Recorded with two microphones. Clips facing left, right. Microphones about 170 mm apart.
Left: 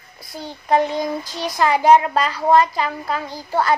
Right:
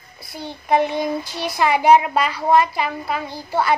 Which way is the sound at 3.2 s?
15° left (ahead or behind).